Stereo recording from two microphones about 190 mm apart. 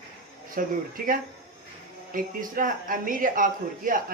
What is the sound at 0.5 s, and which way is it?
Speech, 45° right (ahead or behind).